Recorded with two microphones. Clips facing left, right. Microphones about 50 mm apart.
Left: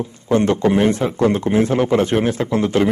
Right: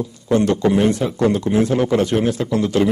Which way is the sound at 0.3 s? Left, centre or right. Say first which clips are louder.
Left 1 dB; left.